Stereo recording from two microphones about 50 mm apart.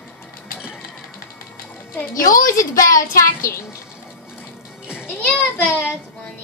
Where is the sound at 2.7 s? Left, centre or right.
Left.